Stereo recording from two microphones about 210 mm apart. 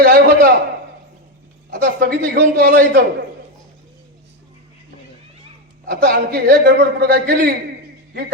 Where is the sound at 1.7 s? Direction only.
45° right (ahead or behind).